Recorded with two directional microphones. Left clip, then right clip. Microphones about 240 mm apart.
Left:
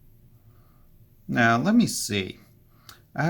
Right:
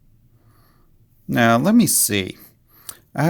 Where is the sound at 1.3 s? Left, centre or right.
Right.